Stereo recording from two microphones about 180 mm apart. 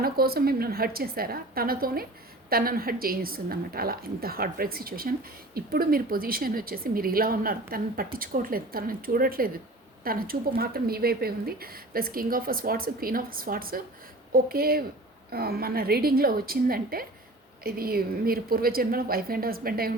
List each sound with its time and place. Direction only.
0.0 s speech: 55° right (ahead or behind)